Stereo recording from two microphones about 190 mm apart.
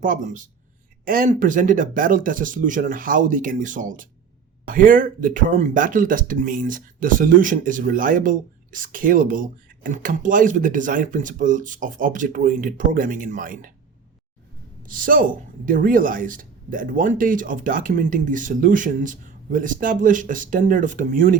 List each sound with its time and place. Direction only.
0.0 s speech: 45° right (ahead or behind)
14.8 s speech: 45° right (ahead or behind)